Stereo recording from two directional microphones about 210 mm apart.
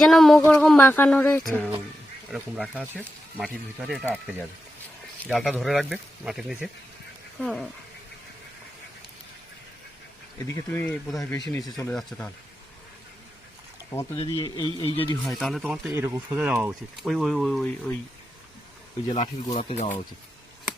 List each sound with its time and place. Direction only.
0.0 s speech: centre (ahead or behind)
10.4 s speech: 10° left (ahead or behind)
14.2 s speech: 20° left (ahead or behind)
15.3 s speech: centre (ahead or behind)
19.1 s speech: 30° left (ahead or behind)